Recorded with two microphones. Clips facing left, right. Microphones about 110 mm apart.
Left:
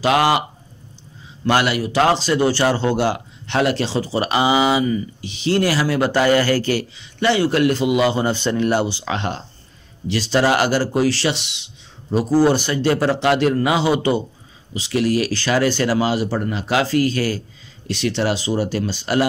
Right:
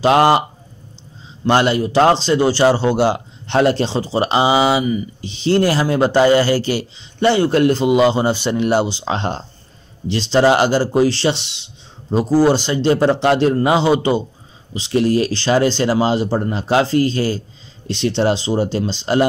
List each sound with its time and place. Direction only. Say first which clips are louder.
0.0 s speech: right 4 dB; 35° right (ahead or behind)
1.4 s a man's voice: right 3 dB; 30° right (ahead or behind)
3.4 s a man's voice: right 4 dB; 35° right (ahead or behind); by 5.0 s 15° right (ahead or behind)
5.2 s a man's voice: right 4 dB; 30° right (ahead or behind)
7.2 s a man's voice: right 3 dB; 30° right (ahead or behind)
9.0 s a man's voice: right 3 dB; 30° right (ahead or behind)